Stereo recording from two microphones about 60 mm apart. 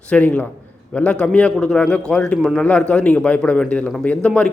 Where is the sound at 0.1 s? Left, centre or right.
Left.